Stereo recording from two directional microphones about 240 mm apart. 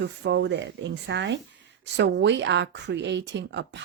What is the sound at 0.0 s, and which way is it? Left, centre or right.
Speech, right.